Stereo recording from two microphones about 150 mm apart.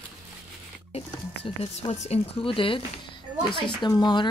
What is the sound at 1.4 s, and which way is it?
Speech, 40° left (ahead or behind).